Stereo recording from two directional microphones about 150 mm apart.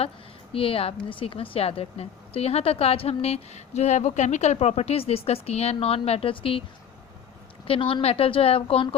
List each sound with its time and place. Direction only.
0.5 s a woman's voice: 40° left (ahead or behind)
7.7 s a woman's voice: 35° left (ahead or behind)